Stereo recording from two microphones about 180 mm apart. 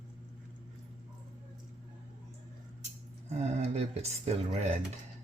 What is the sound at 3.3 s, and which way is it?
Speech, 35° right (ahead or behind).